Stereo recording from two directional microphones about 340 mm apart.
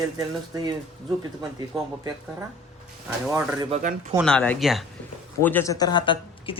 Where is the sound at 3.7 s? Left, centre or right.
Right.